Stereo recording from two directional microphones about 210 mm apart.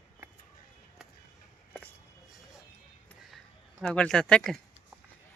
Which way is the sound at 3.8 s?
5° left (ahead or behind).